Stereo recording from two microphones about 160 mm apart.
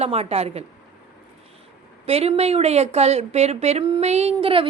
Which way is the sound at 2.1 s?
40° right (ahead or behind).